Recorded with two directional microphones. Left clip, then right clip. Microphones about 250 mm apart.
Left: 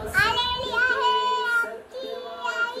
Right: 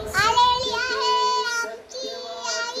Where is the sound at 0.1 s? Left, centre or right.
Centre.